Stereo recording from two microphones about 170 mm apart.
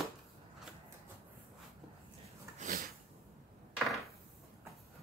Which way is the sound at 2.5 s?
50° right (ahead or behind).